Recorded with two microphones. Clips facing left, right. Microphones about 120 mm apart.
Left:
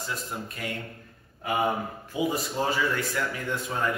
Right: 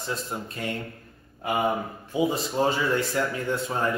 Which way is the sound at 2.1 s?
25° right (ahead or behind).